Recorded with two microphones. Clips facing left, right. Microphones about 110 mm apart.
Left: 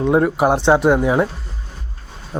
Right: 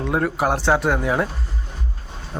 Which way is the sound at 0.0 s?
20° left (ahead or behind).